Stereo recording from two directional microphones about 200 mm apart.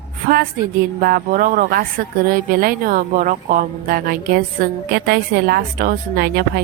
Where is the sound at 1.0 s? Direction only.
45° right (ahead or behind).